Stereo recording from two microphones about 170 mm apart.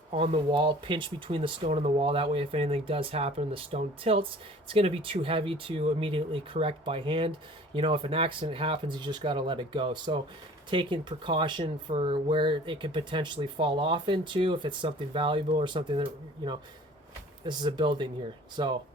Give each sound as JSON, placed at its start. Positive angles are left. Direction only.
{"t": 0.1, "sound": "speech", "side_deg": -35}